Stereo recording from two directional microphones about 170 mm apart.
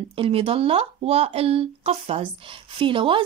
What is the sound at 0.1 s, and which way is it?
Speech, 35° right (ahead or behind).